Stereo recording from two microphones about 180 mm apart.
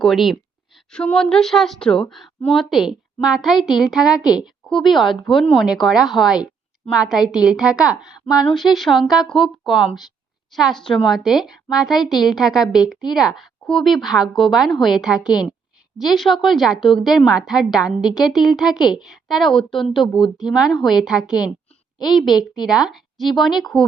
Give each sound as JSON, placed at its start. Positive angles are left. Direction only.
{"t": 0.0, "sound": "a woman's voice", "side_deg": 0}
{"t": 22.3, "sound": "a woman's voice", "side_deg": 25}
{"t": 22.7, "sound": "a woman's voice", "side_deg": 0}